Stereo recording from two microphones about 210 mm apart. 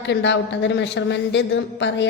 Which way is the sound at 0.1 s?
55° left (ahead or behind).